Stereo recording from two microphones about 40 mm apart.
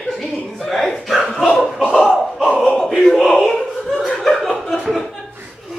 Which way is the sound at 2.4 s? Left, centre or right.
Left.